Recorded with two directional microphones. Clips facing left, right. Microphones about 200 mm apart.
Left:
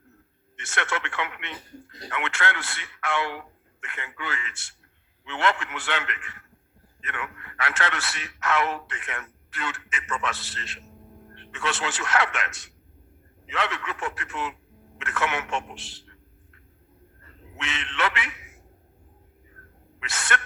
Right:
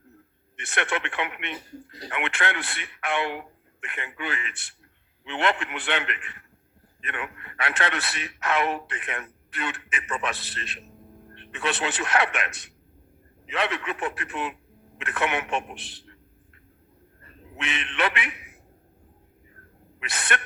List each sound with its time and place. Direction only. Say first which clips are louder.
0.5 s a man's voice: right 2 dB; 20° right (ahead or behind)
17.2 s a sound: right 2 dB; 20° right (ahead or behind)
20.0 s a man's voice: even; 20° right (ahead or behind)